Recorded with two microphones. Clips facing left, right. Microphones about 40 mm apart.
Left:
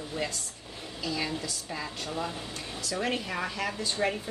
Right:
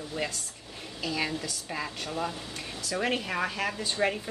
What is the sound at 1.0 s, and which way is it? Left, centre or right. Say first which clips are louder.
Speech: right 1 dB; right.